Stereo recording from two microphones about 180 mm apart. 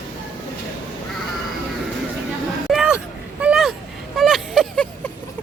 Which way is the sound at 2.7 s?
5° right (ahead or behind).